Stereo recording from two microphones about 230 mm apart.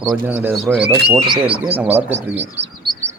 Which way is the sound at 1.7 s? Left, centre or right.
Centre.